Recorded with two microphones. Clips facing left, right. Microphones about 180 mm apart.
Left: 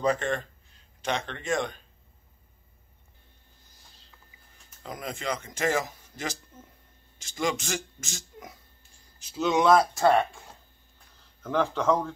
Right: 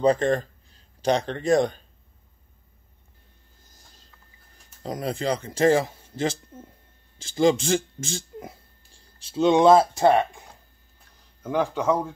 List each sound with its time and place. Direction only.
0.0 s speech: 35° right (ahead or behind)
4.8 s speech: 35° right (ahead or behind)
11.4 s a man's voice: 10° right (ahead or behind)